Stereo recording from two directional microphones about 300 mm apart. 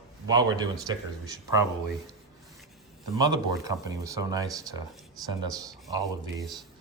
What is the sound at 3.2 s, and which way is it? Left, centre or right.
Speech, centre.